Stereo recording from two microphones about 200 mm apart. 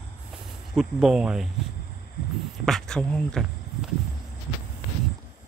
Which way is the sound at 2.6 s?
5° left (ahead or behind).